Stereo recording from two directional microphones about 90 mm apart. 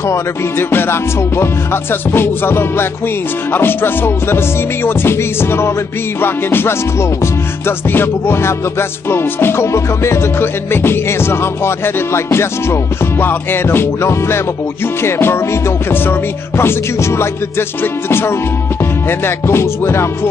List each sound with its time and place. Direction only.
0.0 s music: 30° left (ahead or behind)